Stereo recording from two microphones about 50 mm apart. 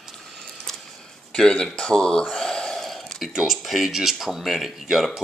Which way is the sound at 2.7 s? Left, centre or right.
Centre.